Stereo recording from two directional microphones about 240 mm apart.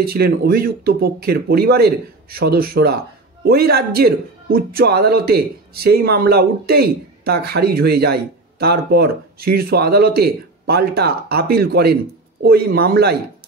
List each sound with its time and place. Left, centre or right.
0.0 s speech: right